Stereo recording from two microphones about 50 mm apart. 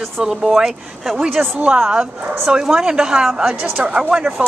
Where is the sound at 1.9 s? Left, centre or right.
Centre.